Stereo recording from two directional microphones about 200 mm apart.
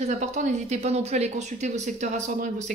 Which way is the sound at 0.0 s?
35° right (ahead or behind).